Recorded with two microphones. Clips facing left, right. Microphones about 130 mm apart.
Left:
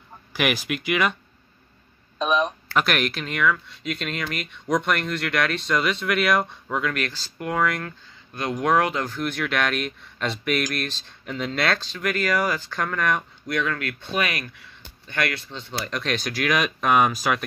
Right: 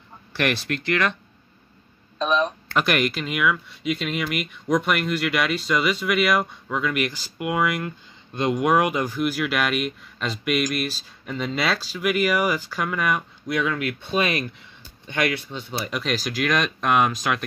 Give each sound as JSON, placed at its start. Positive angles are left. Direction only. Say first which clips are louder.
{"t": 0.3, "sound": "speech", "louder": "even", "side_deg": 10}
{"t": 2.1, "sound": "speech", "louder": "even", "side_deg": 10}
{"t": 7.0, "sound": "speech", "louder": "right 3 dB", "side_deg": -15}
{"t": 14.2, "sound": "speech", "louder": "right 5 dB", "side_deg": -25}
{"t": 15.0, "sound": "speech", "louder": "right 3 dB", "side_deg": -15}